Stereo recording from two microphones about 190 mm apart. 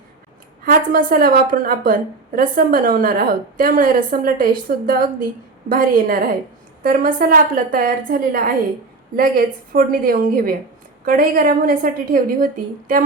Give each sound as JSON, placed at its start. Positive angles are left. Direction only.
{"t": 0.6, "sound": "a woman's voice", "side_deg": -50}